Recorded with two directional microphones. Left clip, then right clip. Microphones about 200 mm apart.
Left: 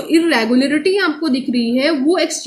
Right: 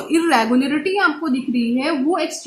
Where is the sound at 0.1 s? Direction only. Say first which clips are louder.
Left 2 dB; 35° right (ahead or behind).